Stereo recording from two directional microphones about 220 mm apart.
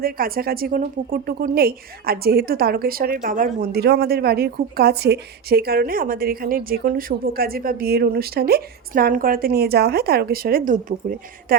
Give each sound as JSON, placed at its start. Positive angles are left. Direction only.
{"t": 0.0, "sound": "a woman's voice", "side_deg": -40}